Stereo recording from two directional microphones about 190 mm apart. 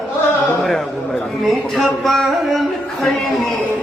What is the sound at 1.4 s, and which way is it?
Speech, centre (ahead or behind).